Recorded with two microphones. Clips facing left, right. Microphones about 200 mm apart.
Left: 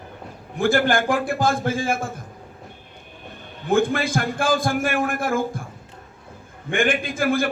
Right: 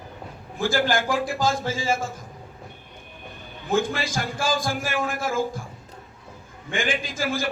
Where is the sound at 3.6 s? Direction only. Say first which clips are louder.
Left 4 dB; 55° left (ahead or behind).